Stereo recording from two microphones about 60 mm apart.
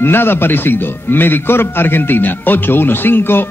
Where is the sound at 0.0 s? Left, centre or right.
Left.